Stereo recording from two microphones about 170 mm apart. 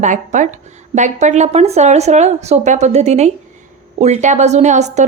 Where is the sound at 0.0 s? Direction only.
45° right (ahead or behind).